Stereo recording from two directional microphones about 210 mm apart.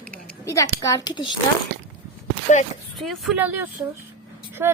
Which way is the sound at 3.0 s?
Centre (ahead or behind).